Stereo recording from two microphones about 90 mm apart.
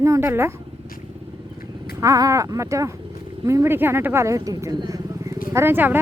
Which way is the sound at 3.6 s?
25° right (ahead or behind).